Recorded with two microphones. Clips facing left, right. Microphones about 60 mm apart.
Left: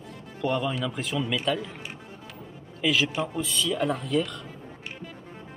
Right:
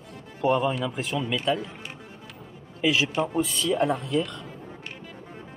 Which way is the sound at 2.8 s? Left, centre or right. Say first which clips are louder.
Right 1 dB; centre.